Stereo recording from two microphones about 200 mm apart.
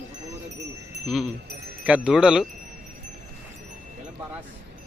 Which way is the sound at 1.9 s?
5° right (ahead or behind).